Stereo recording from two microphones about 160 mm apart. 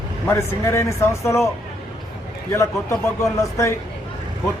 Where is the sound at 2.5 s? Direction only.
20° left (ahead or behind).